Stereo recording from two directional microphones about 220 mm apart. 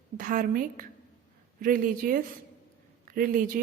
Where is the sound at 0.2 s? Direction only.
40° right (ahead or behind).